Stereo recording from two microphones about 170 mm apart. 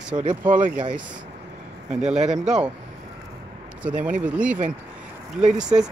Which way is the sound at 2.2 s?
45° right (ahead or behind).